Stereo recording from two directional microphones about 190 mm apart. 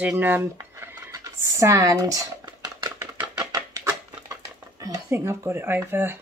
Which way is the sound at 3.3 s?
20° right (ahead or behind).